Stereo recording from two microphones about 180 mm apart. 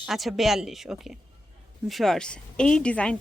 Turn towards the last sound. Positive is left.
turn(degrees=5)  # may be behind; listen again after turning